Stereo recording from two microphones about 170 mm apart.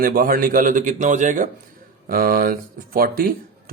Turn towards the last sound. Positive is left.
turn(degrees=-60)  # may be behind; listen again after turning